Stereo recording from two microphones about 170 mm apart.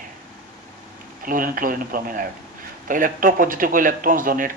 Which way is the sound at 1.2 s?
55° right (ahead or behind).